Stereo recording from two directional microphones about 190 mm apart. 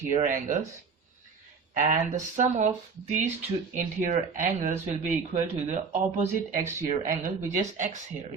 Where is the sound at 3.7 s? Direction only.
40° right (ahead or behind).